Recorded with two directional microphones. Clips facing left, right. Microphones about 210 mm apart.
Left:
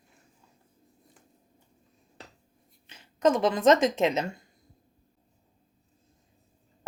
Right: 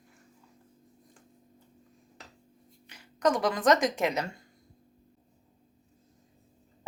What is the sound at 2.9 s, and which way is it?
Speech, 25° left (ahead or behind).